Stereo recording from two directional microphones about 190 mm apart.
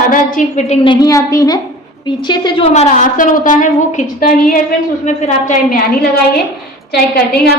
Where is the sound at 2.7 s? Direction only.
40° left (ahead or behind).